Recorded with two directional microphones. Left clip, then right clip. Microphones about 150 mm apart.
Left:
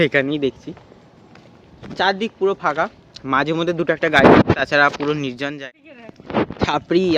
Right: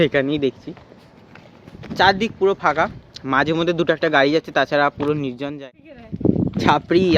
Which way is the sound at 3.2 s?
10° right (ahead or behind).